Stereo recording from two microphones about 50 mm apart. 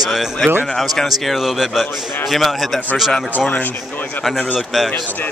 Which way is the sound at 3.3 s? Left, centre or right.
Left.